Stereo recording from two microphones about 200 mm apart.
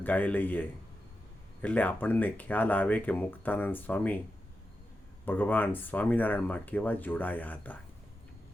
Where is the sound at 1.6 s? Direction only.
10° left (ahead or behind).